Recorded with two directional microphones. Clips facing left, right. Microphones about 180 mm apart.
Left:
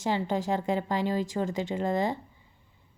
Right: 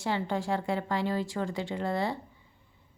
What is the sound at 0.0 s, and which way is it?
Speech, 20° left (ahead or behind).